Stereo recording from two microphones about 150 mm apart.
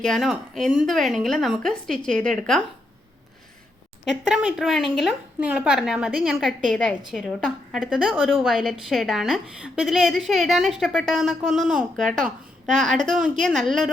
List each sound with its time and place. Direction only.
0.0 s a woman's voice: centre (ahead or behind)
4.0 s a woman's voice: 5° right (ahead or behind)
11.9 s a woman's voice: 60° right (ahead or behind)
13.4 s a woman's voice: centre (ahead or behind)